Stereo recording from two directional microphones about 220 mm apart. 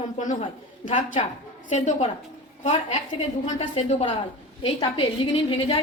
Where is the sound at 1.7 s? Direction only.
30° left (ahead or behind).